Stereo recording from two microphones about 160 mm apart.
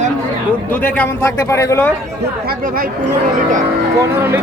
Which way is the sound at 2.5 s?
60° right (ahead or behind).